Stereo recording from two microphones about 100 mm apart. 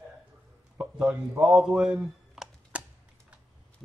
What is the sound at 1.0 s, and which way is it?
Speech, 5° right (ahead or behind).